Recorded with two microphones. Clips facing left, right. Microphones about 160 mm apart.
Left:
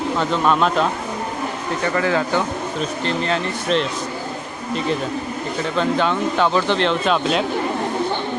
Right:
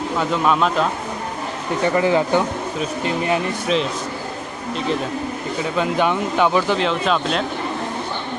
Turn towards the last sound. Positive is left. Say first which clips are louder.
# left 1 dB
turn(degrees=0)  # may be behind; listen again after turning